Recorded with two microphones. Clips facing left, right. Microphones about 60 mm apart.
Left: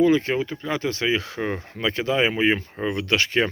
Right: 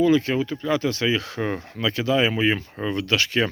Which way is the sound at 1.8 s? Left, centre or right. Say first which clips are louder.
Right 1 dB; left.